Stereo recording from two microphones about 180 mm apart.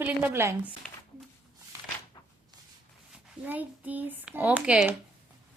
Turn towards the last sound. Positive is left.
turn(degrees=-5)  # may be behind; listen again after turning